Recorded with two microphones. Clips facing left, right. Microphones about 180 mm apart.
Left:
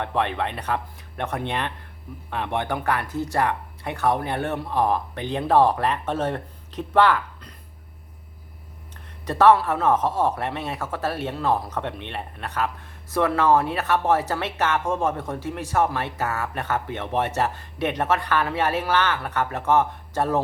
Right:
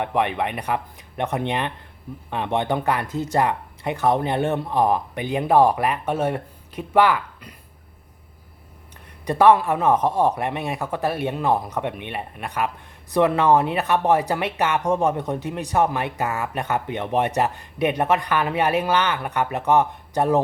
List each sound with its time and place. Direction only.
0.0 s speech: 15° right (ahead or behind)
9.2 s speech: 15° right (ahead or behind)